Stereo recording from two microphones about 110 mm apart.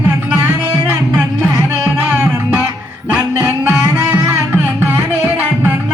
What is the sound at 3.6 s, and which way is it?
Music, 10° right (ahead or behind).